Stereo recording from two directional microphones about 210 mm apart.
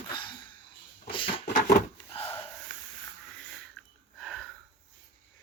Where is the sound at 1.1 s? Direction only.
25° left (ahead or behind).